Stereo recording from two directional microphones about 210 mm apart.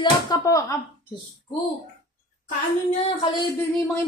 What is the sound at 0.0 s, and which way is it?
Speech, 20° left (ahead or behind).